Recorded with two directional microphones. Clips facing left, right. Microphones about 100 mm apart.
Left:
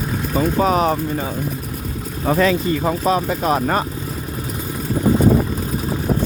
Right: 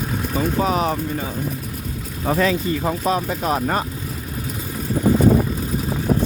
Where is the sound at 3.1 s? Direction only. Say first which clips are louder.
Left 3 dB; 85° left.